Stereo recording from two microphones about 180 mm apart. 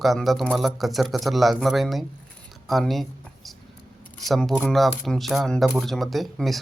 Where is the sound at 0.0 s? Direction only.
Centre (ahead or behind).